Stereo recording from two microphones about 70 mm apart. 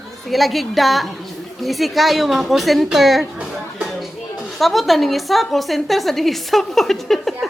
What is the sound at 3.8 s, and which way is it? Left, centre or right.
Music, centre.